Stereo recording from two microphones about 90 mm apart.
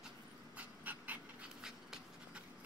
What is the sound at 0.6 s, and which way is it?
Dog, 15° right (ahead or behind).